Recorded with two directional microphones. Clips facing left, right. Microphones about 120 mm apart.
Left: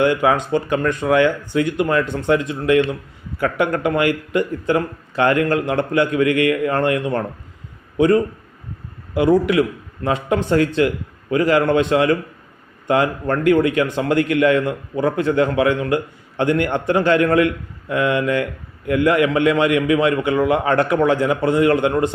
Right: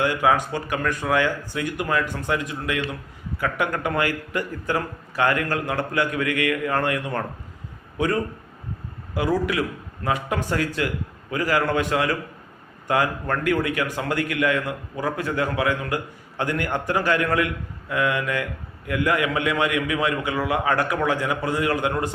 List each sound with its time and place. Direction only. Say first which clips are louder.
0.0 s a man's voice: left 4 dB; 25° left (ahead or behind)